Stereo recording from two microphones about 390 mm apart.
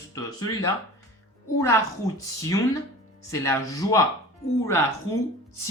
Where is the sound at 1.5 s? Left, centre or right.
Centre.